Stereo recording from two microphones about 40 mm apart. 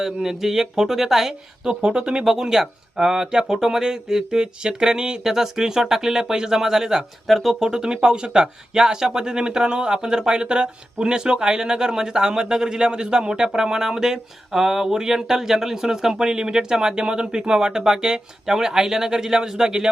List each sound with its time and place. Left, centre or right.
0.0 s speech: centre
1.8 s speech: right
2.2 s speech: centre
7.3 s speech: centre
7.6 s speech: centre